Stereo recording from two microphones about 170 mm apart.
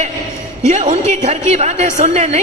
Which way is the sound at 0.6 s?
45° right (ahead or behind).